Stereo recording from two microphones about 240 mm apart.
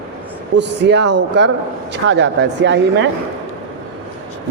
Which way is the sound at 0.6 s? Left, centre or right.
Right.